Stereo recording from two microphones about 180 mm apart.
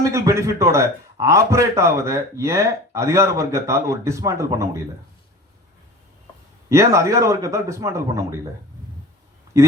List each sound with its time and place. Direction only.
0.0 s a man's voice: 15° right (ahead or behind)
6.7 s a man's voice: 15° right (ahead or behind)